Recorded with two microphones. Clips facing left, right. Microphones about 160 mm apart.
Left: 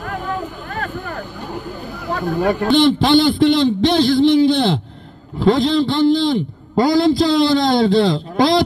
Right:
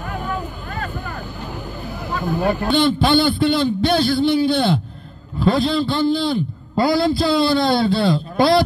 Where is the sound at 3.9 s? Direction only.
90° left.